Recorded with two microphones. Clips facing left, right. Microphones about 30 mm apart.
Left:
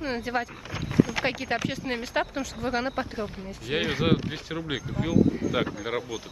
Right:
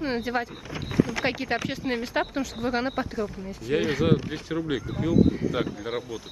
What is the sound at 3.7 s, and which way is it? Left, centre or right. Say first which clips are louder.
Speech: right 3 dB; left.